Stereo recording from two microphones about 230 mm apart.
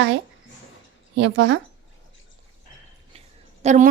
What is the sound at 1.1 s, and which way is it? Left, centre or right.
Speech, right.